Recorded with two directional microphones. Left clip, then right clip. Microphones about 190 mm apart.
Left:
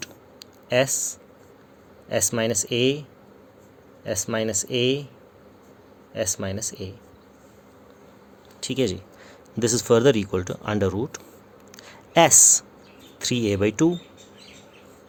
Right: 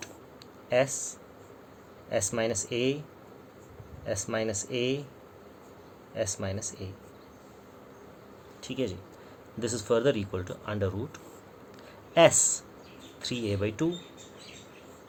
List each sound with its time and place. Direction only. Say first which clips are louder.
0.7 s speech: left 5 dB; 45° left (ahead or behind)
4.0 s speech: left 5 dB; 45° left (ahead or behind)
6.1 s speech: left 5 dB; 45° left (ahead or behind)
8.6 s speech: left 9 dB; 60° left (ahead or behind)